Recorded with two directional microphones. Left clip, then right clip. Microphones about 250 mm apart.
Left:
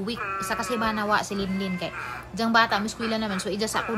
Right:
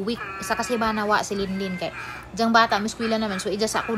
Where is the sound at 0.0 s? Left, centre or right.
Centre.